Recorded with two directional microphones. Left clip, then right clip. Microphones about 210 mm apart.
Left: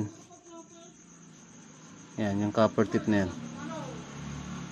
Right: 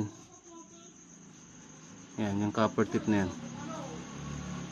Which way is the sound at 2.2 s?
15° left (ahead or behind).